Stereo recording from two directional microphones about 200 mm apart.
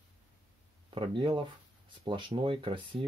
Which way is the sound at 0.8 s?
25° right (ahead or behind).